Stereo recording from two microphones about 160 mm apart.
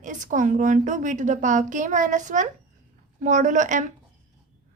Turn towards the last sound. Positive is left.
turn(degrees=-50)  # may be behind; listen again after turning